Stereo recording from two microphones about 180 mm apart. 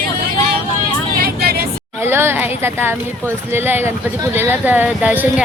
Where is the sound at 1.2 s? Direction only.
55° right (ahead or behind).